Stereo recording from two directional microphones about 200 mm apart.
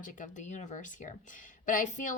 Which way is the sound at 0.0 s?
40° left (ahead or behind).